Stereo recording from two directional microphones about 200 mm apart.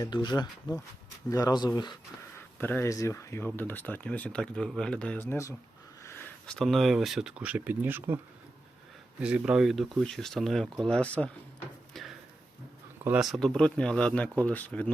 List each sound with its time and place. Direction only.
0.0 s speech: 20° left (ahead or behind)
2.6 s speech: 10° left (ahead or behind); by 8.2 s 10° right (ahead or behind)
9.2 s speech: 5° right (ahead or behind)
11.9 s a sound: centre (ahead or behind)
13.1 s speech: centre (ahead or behind)